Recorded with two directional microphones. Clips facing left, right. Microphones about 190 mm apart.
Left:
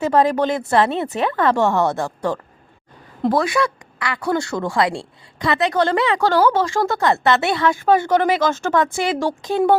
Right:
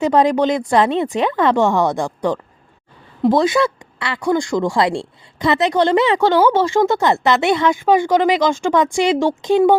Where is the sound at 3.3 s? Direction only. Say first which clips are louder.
Right 4 dB; 25° right (ahead or behind).